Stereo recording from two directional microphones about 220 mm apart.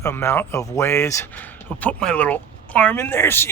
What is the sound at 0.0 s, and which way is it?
Speech, 10° left (ahead or behind).